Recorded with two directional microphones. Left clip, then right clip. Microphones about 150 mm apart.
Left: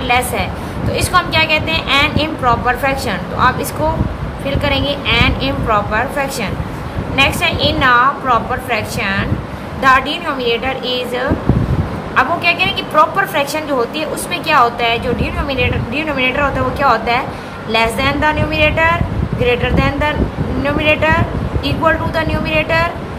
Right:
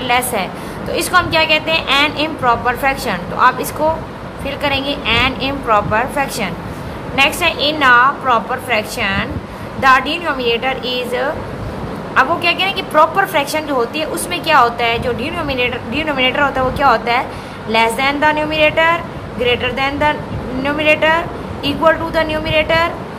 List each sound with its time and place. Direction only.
0.1 s a woman's voice: 30° right (ahead or behind)